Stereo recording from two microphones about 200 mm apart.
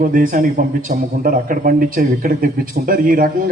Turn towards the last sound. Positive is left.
turn(degrees=-45)  # may be behind; listen again after turning